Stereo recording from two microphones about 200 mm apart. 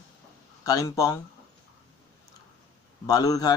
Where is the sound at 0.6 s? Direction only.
15° left (ahead or behind).